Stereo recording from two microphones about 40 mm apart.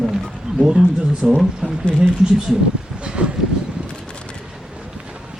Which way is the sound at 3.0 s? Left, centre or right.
Right.